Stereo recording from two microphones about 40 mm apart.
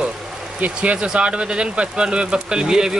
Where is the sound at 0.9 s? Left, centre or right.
Right.